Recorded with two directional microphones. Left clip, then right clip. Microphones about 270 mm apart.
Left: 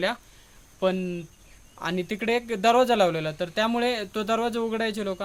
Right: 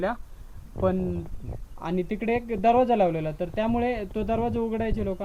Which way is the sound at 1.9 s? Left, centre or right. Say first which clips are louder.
Even; left.